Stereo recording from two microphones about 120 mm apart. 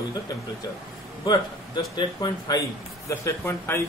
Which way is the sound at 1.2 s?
30° left (ahead or behind).